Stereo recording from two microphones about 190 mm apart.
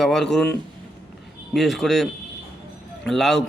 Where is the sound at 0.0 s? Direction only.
Centre (ahead or behind).